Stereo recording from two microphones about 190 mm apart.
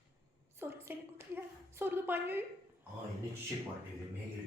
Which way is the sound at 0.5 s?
15° right (ahead or behind).